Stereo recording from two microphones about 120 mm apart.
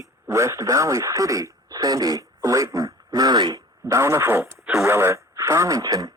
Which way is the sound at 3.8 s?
25° right (ahead or behind).